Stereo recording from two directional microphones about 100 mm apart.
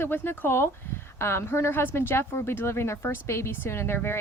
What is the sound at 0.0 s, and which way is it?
A woman's voice, 20° left (ahead or behind).